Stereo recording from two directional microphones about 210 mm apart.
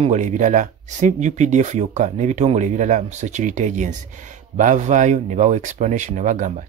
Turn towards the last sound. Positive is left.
turn(degrees=-35)  # may be behind; listen again after turning